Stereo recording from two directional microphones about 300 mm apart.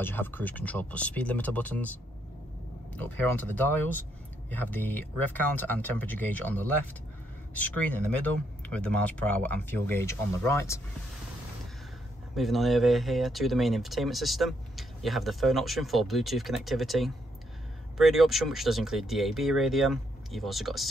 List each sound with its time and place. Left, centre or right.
0.0 s speech: centre
3.3 s speech: centre
12.4 s speech: centre